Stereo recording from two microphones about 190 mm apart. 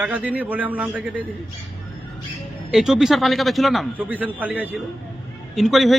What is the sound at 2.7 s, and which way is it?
A man's voice, centre (ahead or behind).